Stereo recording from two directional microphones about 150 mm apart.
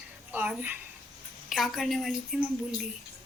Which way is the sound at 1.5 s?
Centre (ahead or behind).